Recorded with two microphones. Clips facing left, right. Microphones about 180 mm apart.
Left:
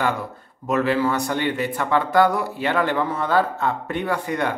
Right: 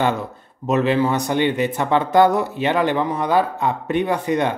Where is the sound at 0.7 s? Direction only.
20° right (ahead or behind).